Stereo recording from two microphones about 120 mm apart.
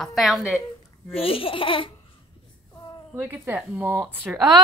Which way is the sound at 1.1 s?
50° left (ahead or behind).